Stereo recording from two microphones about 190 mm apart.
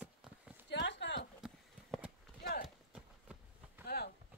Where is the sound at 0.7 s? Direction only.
65° left (ahead or behind).